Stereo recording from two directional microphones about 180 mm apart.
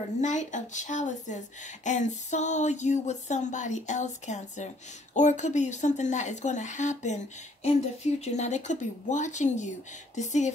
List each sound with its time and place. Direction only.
0.2 s a woman's voice: 40° left (ahead or behind)